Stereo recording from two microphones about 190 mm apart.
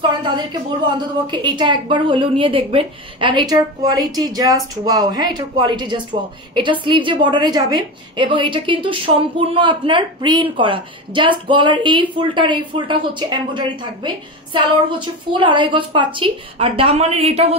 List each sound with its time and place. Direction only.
0.2 s a woman's voice: 25° right (ahead or behind)